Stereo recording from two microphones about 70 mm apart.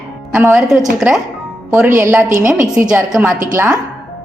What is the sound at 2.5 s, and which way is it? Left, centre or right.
Speech, centre.